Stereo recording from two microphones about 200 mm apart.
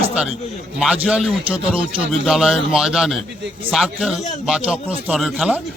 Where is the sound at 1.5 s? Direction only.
25° right (ahead or behind).